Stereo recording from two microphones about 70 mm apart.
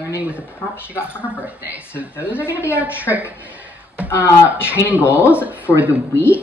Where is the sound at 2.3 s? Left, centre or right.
Left.